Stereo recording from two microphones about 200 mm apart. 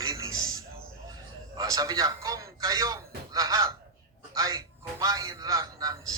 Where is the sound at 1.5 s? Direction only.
15° right (ahead or behind).